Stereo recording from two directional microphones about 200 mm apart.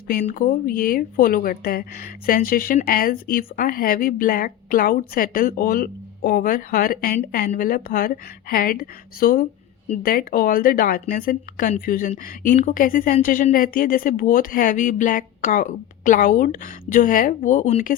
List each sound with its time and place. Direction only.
0.1 s a woman's voice: 45° left (ahead or behind)